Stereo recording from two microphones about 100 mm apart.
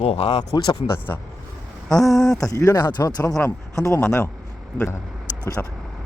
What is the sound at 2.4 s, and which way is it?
Speech, 30° left (ahead or behind).